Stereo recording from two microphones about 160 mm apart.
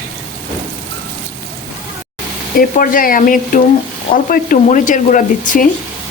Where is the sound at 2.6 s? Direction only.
60° left (ahead or behind).